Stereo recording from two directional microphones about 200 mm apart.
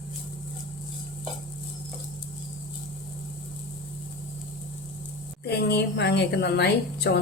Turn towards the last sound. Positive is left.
turn(degrees=55)  # may be behind; listen again after turning